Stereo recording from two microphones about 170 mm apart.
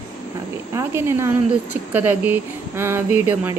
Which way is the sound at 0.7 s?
15° right (ahead or behind).